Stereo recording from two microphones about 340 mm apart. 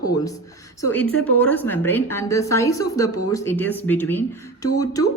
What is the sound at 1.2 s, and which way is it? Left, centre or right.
A woman's voice, centre.